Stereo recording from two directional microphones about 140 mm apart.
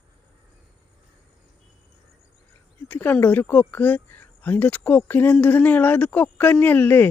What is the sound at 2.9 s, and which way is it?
Speech, 10° left (ahead or behind).